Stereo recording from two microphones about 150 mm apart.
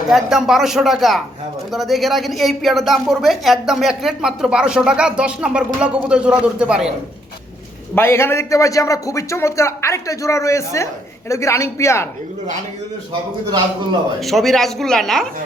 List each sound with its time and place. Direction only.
0.1 s speech: 5° right (ahead or behind)
7.9 s a man's voice: 15° left (ahead or behind)
14.2 s speech: centre (ahead or behind)